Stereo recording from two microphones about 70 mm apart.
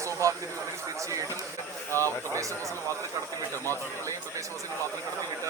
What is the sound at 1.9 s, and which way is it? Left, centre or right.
Speech, right.